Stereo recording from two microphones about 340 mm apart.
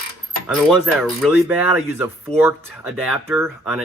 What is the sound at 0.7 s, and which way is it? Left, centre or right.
Speech, centre.